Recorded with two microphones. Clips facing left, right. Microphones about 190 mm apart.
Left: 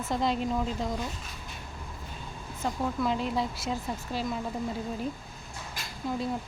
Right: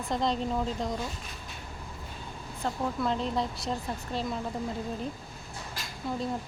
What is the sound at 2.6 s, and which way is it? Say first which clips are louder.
Speech: left 1 dB; centre (ahead or behind).